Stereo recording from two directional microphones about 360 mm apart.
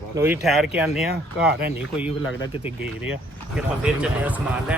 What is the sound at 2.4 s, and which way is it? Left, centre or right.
Speech, centre.